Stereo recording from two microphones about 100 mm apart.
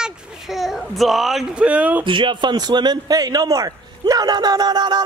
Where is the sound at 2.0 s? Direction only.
55° right (ahead or behind).